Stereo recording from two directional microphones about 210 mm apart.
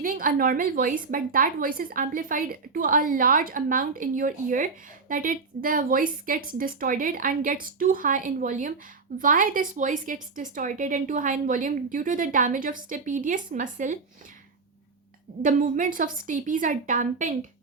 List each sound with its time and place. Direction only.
0.0 s a woman's voice: 40° right (ahead or behind)
15.4 s a woman's voice: 40° right (ahead or behind)